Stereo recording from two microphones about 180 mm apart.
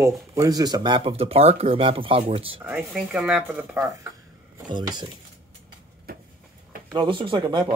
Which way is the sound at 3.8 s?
15° right (ahead or behind).